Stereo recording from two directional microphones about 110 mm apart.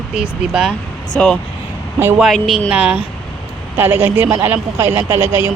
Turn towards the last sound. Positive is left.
turn(degrees=-20)  # may be behind; listen again after turning